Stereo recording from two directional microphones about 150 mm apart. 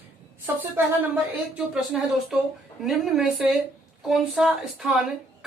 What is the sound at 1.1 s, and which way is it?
Speech, 5° right (ahead or behind).